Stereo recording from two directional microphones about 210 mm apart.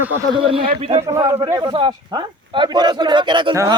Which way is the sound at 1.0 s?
15° right (ahead or behind).